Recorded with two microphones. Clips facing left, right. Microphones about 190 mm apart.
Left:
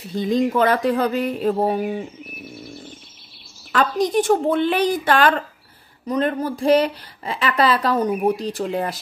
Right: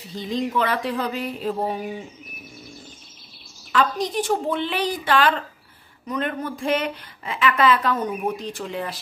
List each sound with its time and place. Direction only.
0.1 s a woman's voice: 50° left (ahead or behind)
2.5 s bird: 55° left (ahead or behind)
3.7 s a woman's voice: 50° left (ahead or behind)
6.0 s a woman's voice: 35° left (ahead or behind)